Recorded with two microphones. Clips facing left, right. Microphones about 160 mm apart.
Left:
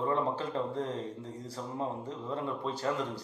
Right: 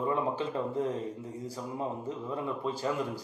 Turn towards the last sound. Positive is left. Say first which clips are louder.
# right 1 dB
turn(degrees=-10)  # may be behind; listen again after turning